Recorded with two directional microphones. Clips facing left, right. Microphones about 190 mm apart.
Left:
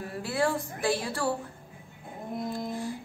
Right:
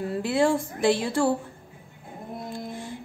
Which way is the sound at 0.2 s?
20° right (ahead or behind).